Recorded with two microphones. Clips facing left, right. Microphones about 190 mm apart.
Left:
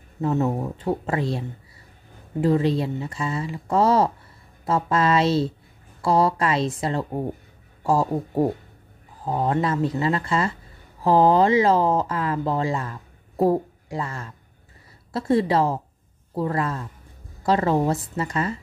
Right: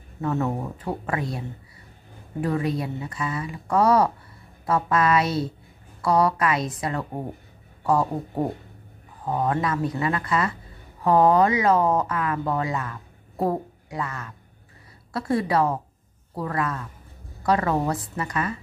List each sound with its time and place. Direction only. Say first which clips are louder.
0.2 s speech: left 3 dB; 20° left (ahead or behind)
2.4 s speech: left 5 dB; 25° left (ahead or behind)
9.2 s a woman's voice: left 2 dB; 25° left (ahead or behind)